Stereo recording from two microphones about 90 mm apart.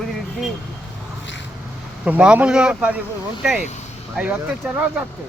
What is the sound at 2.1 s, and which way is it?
Speech, 15° right (ahead or behind).